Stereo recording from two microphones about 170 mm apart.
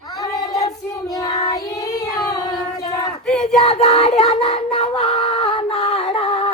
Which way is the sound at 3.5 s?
35° left (ahead or behind).